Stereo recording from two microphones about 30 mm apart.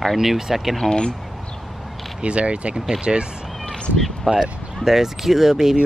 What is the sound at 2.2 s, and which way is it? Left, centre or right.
Speech, right.